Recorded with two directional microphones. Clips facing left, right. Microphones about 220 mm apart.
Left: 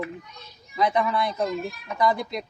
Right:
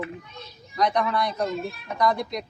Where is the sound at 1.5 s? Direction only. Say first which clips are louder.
Even; 30° right (ahead or behind).